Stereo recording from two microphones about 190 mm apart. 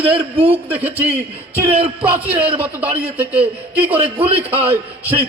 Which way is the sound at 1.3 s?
30° right (ahead or behind).